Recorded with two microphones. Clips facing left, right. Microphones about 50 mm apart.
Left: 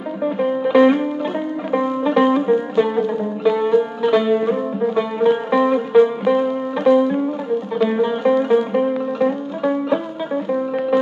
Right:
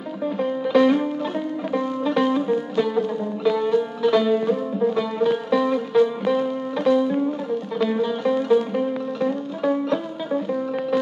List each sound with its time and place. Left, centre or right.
0.2 s music: left